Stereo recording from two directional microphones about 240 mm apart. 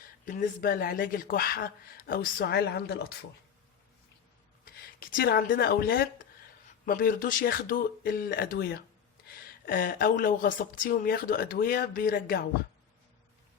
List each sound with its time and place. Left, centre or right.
0.3 s speech: left
4.6 s speech: left